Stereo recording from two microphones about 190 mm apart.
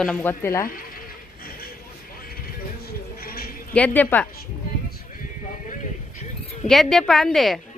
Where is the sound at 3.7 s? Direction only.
5° left (ahead or behind).